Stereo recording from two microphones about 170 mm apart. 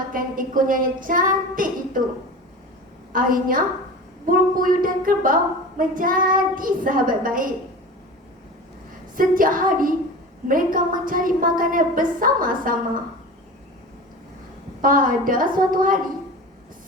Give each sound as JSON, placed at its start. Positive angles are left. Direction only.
{"t": 0.1, "sound": "child singing", "side_deg": -55}
{"t": 3.1, "sound": "a woman's voice", "side_deg": -55}
{"t": 9.1, "sound": "a woman's voice", "side_deg": -55}
{"t": 14.8, "sound": "a woman's voice", "side_deg": -55}